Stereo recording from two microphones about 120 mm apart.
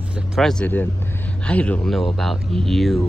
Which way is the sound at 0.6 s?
15° left (ahead or behind).